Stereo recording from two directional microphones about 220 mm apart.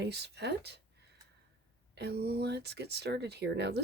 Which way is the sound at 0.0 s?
50° right (ahead or behind).